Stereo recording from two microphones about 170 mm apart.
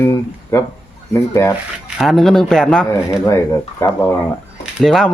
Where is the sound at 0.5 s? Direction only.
15° left (ahead or behind).